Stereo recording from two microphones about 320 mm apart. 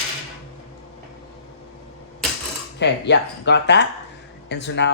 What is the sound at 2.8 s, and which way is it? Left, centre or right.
Speech, left.